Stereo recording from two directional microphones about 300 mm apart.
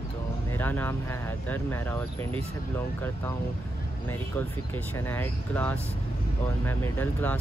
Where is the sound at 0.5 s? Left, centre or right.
Centre.